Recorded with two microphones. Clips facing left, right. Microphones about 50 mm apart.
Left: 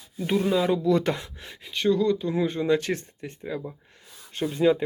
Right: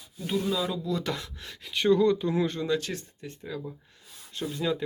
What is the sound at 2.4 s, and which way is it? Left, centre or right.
Speech, centre.